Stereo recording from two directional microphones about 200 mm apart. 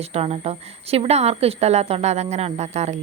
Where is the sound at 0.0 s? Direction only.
30° right (ahead or behind).